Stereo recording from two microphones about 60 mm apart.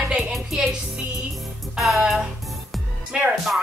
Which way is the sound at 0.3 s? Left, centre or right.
Centre.